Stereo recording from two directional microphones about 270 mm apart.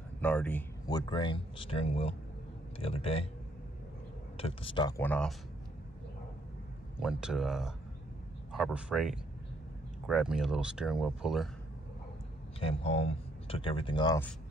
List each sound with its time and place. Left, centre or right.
0.2 s a man's voice: centre; by 3.3 s left
4.4 s a man's voice: left
7.0 s speech: centre
12.5 s speech: left